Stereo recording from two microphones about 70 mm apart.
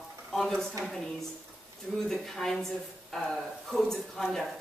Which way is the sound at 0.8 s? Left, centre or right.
Centre.